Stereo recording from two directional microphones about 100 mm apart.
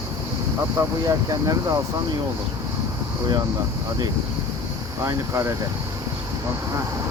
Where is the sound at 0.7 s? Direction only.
40° right (ahead or behind).